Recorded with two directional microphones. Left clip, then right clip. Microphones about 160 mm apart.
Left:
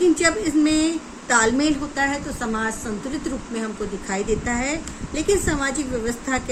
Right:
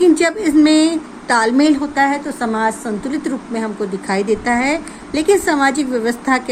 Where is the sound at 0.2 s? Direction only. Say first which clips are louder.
Right 6 dB; 55° right (ahead or behind).